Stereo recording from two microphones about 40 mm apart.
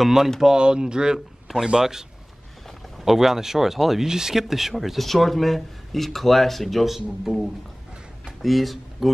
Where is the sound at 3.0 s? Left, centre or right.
Centre.